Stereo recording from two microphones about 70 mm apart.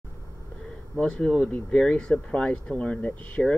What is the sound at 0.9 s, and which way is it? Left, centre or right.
Speech, centre.